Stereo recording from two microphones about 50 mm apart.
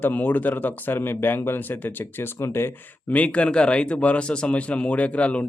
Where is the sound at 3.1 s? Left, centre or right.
Left.